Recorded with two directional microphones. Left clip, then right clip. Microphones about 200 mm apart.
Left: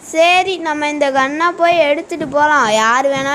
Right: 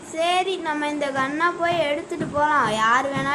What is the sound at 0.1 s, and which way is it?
Speech, 40° left (ahead or behind).